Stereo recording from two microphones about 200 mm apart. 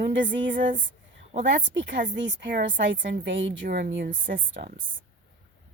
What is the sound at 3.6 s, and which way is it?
Speech, 45° right (ahead or behind).